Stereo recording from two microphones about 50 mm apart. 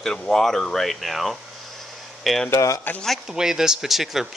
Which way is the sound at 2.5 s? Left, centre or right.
Left.